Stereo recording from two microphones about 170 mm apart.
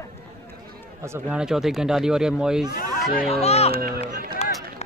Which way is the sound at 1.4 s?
Centre (ahead or behind).